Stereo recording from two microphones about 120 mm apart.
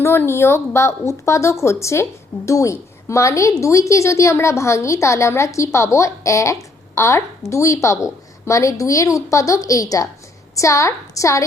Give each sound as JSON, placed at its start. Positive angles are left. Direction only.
{"t": 0.0, "sound": "a woman's voice", "side_deg": 20}